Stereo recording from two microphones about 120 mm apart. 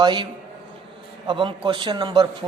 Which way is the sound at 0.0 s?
40° right (ahead or behind).